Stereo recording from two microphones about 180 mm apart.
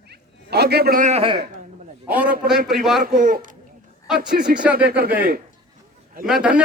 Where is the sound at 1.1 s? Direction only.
30° right (ahead or behind).